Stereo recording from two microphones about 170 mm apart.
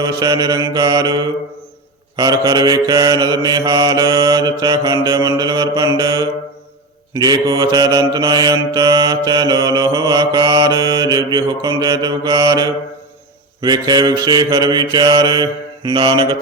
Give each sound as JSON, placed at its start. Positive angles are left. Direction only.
{"t": 0.0, "sound": "mantra", "side_deg": -20}